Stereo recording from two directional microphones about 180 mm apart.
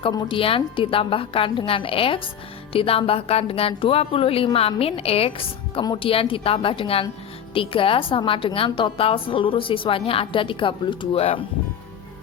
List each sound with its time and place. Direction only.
0.0 s a woman's voice: 25° left (ahead or behind)